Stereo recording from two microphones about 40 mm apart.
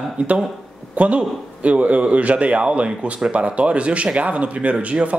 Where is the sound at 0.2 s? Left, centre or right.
Right.